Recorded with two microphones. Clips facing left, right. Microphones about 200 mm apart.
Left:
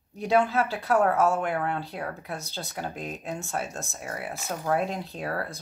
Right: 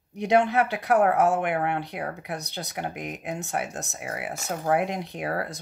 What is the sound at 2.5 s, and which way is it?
Speech, 20° right (ahead or behind).